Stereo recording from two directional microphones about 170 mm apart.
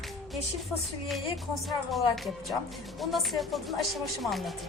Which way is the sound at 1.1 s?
Centre (ahead or behind).